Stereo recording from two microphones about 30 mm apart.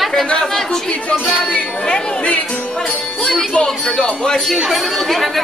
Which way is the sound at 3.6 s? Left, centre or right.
Left.